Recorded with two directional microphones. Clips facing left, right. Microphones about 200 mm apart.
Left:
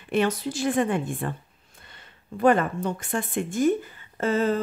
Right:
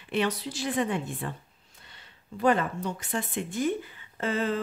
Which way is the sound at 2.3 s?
50° left (ahead or behind).